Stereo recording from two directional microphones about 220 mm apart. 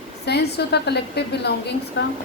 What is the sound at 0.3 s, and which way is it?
A woman's voice, 50° left (ahead or behind).